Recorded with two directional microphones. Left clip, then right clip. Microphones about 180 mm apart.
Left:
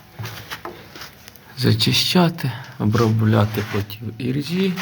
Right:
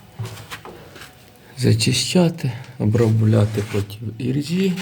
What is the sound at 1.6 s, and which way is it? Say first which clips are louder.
Speech: left 2 dB; 10° right (ahead or behind).